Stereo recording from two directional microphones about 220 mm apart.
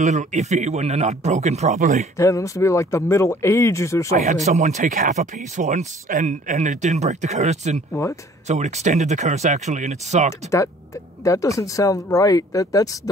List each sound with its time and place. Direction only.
0.0 s speech: 30° right (ahead or behind)
2.1 s speech: 15° left (ahead or behind)
4.2 s speech: 30° right (ahead or behind)
7.9 s speech: 15° left (ahead or behind)
8.5 s speech: 30° right (ahead or behind)
11.2 s speech: 15° left (ahead or behind)